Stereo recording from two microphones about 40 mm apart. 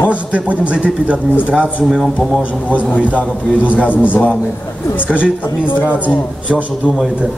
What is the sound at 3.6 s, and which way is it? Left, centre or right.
Speech, right.